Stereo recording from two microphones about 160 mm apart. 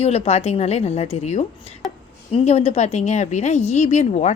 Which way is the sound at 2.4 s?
40° left (ahead or behind).